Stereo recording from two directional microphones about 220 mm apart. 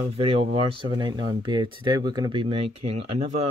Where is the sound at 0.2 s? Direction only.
25° right (ahead or behind).